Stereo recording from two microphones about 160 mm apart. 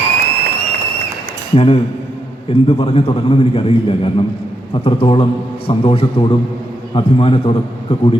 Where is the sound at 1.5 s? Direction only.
35° left (ahead or behind).